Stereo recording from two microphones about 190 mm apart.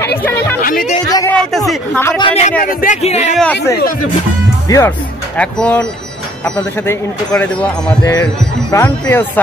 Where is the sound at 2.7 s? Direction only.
50° left (ahead or behind).